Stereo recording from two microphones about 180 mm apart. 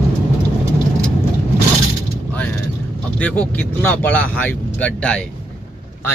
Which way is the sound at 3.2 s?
5° left (ahead or behind).